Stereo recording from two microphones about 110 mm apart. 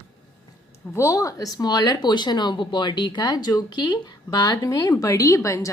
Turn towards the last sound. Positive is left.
turn(degrees=30)  # may be behind; listen again after turning